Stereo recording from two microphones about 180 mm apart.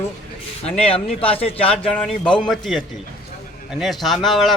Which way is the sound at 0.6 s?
35° left (ahead or behind).